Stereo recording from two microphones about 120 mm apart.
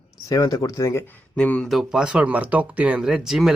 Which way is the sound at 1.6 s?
5° right (ahead or behind).